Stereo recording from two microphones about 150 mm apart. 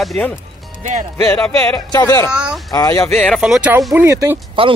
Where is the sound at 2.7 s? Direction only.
25° left (ahead or behind).